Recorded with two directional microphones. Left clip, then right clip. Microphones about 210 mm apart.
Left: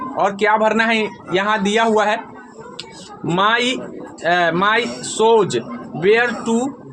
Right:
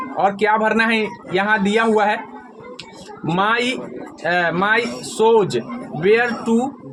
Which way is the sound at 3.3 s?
15° left (ahead or behind).